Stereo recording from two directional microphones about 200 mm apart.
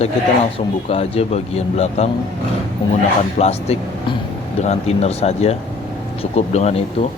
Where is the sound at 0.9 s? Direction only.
30° left (ahead or behind).